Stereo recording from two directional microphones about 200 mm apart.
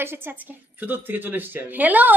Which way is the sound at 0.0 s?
10° right (ahead or behind).